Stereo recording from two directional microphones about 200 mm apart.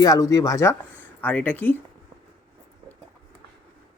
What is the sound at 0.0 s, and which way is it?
Speech, 15° left (ahead or behind).